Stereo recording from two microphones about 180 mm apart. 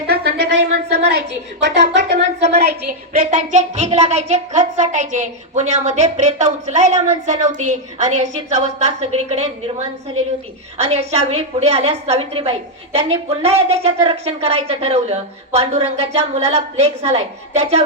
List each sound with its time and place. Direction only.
0.1 s speech: 60° right (ahead or behind)
1.8 s music: 70° right (ahead or behind)
2.6 s a woman's voice: 55° right (ahead or behind); by 17.8 s 35° right (ahead or behind)